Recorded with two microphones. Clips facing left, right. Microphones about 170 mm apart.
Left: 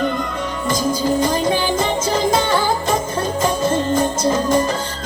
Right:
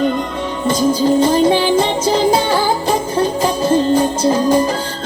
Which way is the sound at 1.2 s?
30° right (ahead or behind).